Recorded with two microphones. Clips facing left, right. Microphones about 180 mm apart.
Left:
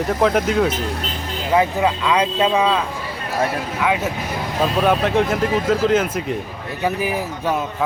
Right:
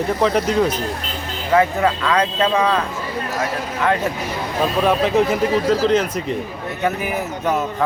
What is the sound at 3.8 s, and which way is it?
Speech, 5° left (ahead or behind).